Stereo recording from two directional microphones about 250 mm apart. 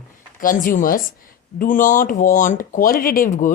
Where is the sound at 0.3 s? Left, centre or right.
Left.